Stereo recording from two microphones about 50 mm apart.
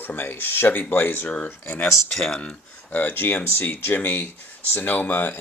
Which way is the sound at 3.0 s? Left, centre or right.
Left.